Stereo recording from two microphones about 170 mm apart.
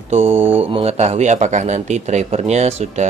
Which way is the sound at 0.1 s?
40° right (ahead or behind).